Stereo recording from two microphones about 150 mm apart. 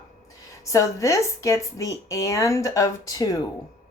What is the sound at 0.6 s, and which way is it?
Speech, 20° left (ahead or behind).